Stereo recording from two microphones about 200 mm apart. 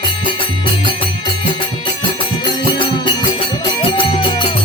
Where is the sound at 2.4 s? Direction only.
20° left (ahead or behind).